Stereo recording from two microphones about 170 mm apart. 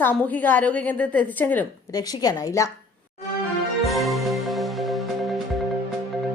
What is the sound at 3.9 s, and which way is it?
Music, centre (ahead or behind).